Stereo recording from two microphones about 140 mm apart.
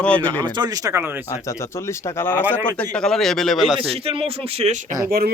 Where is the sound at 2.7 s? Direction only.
5° left (ahead or behind).